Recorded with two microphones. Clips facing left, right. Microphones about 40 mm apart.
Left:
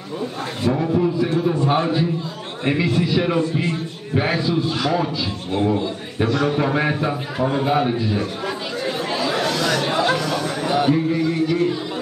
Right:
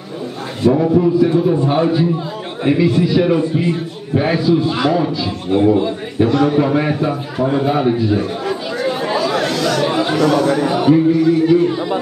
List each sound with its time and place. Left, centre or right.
0.7 s a man's voice: centre
4.6 s a man's voice: centre
9.4 s chatter: centre
10.3 s a sound: centre
11.2 s speech: centre